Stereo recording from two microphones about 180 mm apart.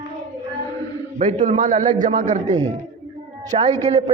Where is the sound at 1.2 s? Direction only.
45° right (ahead or behind).